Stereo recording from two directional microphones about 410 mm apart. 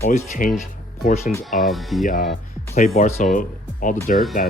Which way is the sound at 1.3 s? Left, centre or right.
Centre.